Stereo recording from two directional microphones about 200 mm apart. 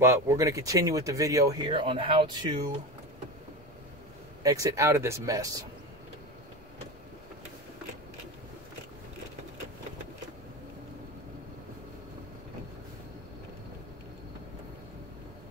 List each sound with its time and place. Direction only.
0.0 s speech: 15° right (ahead or behind)
4.4 s speech: 15° right (ahead or behind)